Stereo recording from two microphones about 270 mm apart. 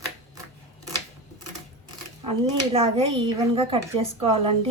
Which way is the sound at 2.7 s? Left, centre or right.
Right.